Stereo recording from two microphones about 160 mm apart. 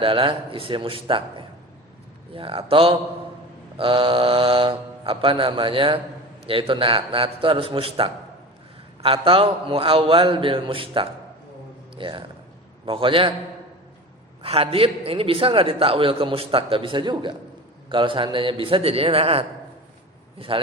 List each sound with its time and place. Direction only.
0.0 s a man's voice: 35° right (ahead or behind)
14.4 s a man's voice: 35° right (ahead or behind)